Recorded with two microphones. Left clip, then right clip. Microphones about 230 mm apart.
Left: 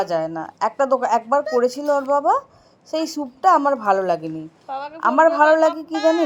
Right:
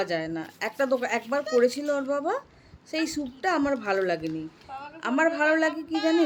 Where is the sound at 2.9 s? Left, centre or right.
Centre.